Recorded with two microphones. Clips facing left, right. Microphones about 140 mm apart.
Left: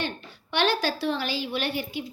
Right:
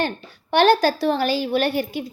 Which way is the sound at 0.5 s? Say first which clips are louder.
Right 9 dB; 45° right (ahead or behind).